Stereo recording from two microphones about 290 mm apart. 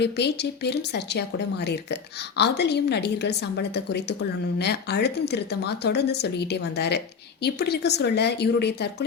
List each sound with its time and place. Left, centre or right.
0.0 s a woman's voice: left